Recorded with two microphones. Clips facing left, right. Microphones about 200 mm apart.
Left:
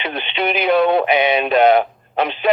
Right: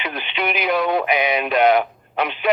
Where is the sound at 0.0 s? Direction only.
30° left (ahead or behind).